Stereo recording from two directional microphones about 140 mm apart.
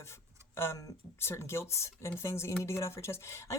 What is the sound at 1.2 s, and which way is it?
Speech, 15° left (ahead or behind).